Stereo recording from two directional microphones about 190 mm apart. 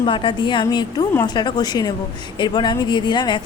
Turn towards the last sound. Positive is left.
turn(degrees=25)  # may be behind; listen again after turning